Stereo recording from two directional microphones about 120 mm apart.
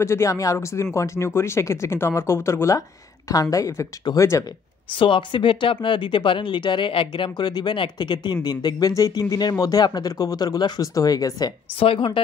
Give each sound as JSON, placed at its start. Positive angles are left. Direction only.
{"t": 0.0, "sound": "speech", "side_deg": 25}
{"t": 4.9, "sound": "speech", "side_deg": 40}
{"t": 11.8, "sound": "speech", "side_deg": 50}